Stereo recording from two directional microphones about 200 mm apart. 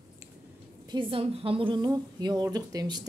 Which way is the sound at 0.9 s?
25° right (ahead or behind).